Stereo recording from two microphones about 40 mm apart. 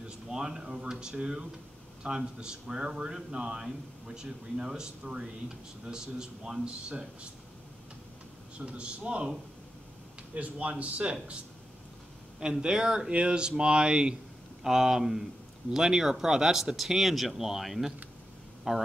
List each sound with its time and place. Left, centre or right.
0.0 s speech: centre
6.6 s speech: right
8.5 s speech: right
10.3 s a man's voice: right
12.4 s speech: right
14.6 s speech: centre